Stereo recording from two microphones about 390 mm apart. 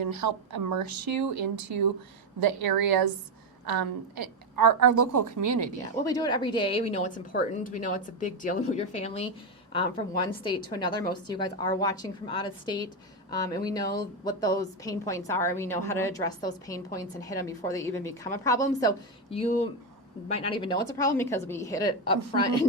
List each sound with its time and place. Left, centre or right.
0.0 s a woman's voice: right
6.0 s a woman's voice: centre